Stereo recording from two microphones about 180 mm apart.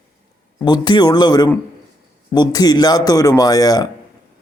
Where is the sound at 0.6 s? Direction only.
25° left (ahead or behind).